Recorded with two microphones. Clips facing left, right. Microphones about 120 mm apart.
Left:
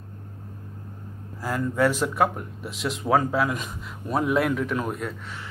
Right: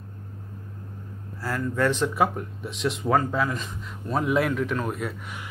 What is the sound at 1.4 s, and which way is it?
Speech, 15° left (ahead or behind).